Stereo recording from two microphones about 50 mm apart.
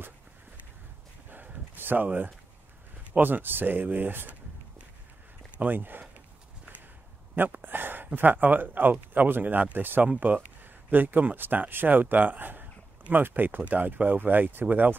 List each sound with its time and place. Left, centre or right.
1.3 s a sound: right
2.0 s speech: right
5.6 s speech: right
7.3 s speech: right